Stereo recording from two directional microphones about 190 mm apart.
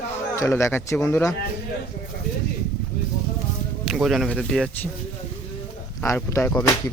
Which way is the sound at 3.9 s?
Centre (ahead or behind).